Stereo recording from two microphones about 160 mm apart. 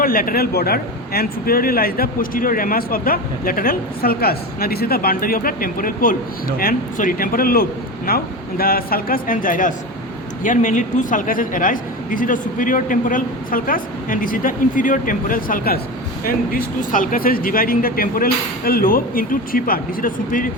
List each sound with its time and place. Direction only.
0.0 s a man's voice: 65° left (ahead or behind)